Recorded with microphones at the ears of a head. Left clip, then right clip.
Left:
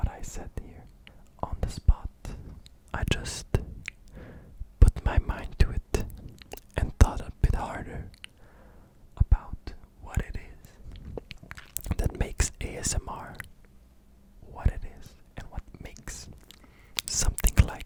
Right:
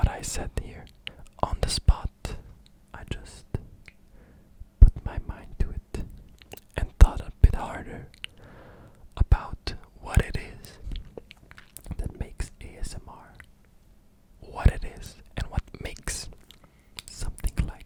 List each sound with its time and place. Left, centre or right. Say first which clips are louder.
0.0 s whispering: right 8 dB; right
2.4 s whispering: left 4 dB; left
7.0 s whispering: even; centre
8.2 s a sound: right 7 dB; right
9.3 s whispering: right 13 dB; right
11.0 s whispering: left 8 dB; left
14.4 s whispering: right 8 dB; right
16.9 s whispering: left 11 dB; left